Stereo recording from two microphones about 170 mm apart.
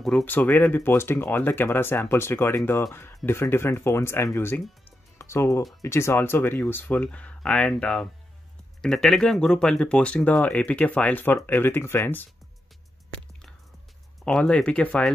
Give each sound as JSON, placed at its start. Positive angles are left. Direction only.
{"t": 0.0, "sound": "speech", "side_deg": 10}
{"t": 14.2, "sound": "speech", "side_deg": 5}